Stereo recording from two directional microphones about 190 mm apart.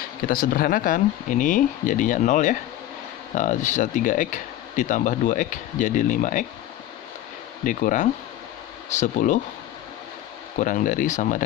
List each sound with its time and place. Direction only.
0.3 s speech: 50° left (ahead or behind)
7.6 s speech: 45° left (ahead or behind)
10.6 s speech: 40° left (ahead or behind)